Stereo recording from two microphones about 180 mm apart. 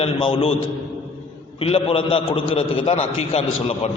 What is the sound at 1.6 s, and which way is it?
A man's voice, 30° left (ahead or behind).